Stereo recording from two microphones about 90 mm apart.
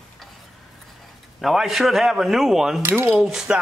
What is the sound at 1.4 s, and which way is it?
Speech, centre (ahead or behind).